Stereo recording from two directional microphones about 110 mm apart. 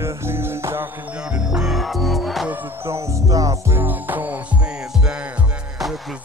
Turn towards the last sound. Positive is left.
turn(degrees=-15)  # may be behind; listen again after turning